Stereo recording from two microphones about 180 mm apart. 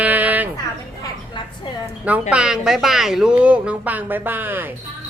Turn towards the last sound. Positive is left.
turn(degrees=-10)  # may be behind; listen again after turning